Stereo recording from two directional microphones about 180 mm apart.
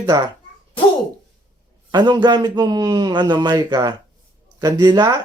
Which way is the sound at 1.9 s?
25° right (ahead or behind).